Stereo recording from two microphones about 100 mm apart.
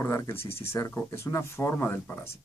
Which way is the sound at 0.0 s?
25° left (ahead or behind).